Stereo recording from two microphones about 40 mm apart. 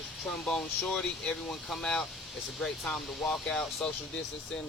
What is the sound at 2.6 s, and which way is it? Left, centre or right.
Speech, centre.